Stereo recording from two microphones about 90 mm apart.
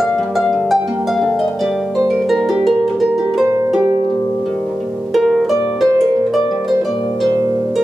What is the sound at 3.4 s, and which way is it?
Harp, 30° right (ahead or behind).